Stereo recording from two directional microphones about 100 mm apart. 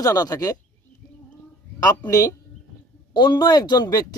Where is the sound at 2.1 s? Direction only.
30° left (ahead or behind).